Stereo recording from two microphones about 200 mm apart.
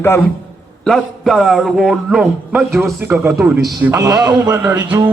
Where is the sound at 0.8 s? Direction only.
Centre (ahead or behind).